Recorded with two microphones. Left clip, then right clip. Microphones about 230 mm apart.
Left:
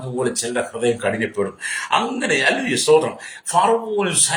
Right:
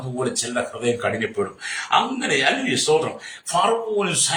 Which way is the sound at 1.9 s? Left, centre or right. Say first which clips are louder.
Even; centre.